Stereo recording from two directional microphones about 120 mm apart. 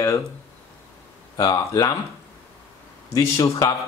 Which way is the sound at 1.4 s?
30° left (ahead or behind).